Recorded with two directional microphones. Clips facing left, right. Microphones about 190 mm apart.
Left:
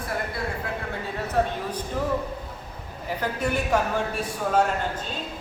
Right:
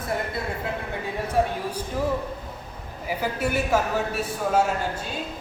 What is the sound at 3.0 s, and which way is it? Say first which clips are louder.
A man's voice: right 1 dB; 5° right (ahead or behind).